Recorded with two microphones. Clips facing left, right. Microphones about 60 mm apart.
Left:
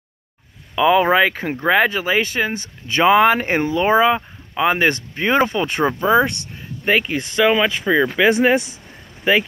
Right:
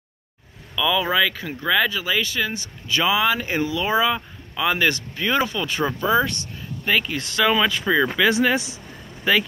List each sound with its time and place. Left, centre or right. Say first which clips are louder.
0.7 s speech: left 6 dB; left
8.2 s speech: left 4 dB; left